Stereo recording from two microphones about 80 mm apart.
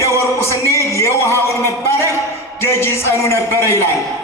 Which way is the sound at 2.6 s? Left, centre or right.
Left.